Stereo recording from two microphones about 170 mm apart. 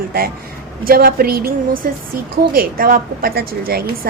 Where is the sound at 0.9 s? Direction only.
60° right (ahead or behind).